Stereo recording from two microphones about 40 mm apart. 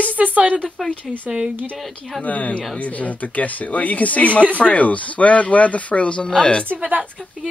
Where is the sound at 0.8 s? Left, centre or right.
Left.